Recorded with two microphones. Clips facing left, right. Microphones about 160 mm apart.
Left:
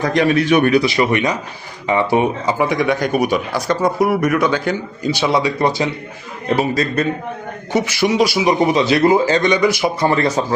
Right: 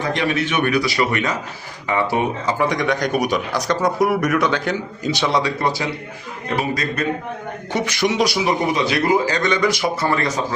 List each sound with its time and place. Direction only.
0.0 s speech: 40° left (ahead or behind)
0.8 s speech: 20° left (ahead or behind)
7.7 s speech: 5° left (ahead or behind)
8.4 s speech: 25° left (ahead or behind)
10.1 s speech: 30° left (ahead or behind)